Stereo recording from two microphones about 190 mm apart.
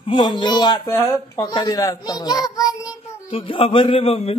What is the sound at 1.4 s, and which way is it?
A child's voice, 20° left (ahead or behind).